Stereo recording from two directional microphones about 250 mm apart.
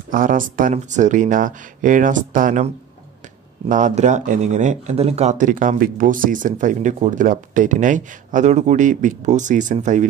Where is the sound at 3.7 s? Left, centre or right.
Right.